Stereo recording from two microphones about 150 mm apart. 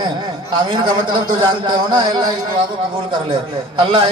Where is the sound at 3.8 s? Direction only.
35° right (ahead or behind).